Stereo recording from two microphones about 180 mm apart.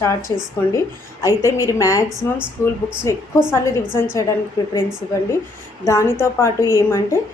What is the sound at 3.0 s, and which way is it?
Speech, 15° left (ahead or behind).